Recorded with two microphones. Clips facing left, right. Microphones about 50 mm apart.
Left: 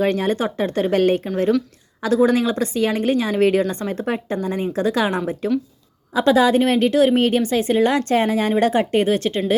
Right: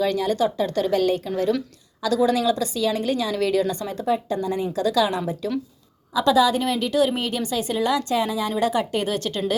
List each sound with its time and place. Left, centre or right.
0.0 s a woman's voice: left